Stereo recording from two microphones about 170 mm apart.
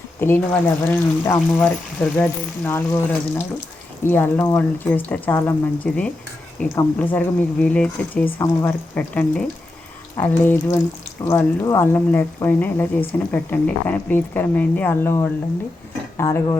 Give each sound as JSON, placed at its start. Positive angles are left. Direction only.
{"t": 0.2, "sound": "speech", "side_deg": 10}